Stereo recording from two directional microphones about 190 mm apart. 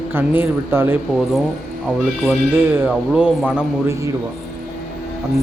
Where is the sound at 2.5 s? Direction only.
10° right (ahead or behind).